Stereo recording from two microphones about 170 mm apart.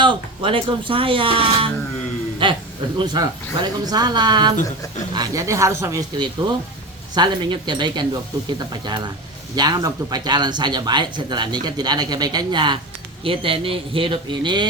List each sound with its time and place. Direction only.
0.0 s speech: 30° right (ahead or behind)